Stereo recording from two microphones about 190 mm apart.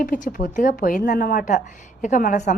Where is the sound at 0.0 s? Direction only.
45° left (ahead or behind).